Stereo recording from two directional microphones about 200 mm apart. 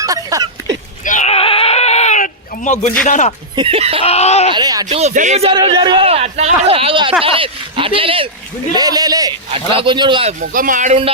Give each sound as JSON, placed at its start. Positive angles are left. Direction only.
{"t": 0.0, "sound": "a sound", "side_deg": -15}
{"t": 1.0, "sound": "bleat", "side_deg": 35}
{"t": 2.8, "sound": "speech", "side_deg": 40}
{"t": 3.5, "sound": "a man's voice", "side_deg": -25}
{"t": 4.0, "sound": "speech", "side_deg": 30}
{"t": 4.5, "sound": "a man's voice", "side_deg": -20}
{"t": 4.9, "sound": "a man's voice", "side_deg": -35}
{"t": 10.4, "sound": "speech", "side_deg": -45}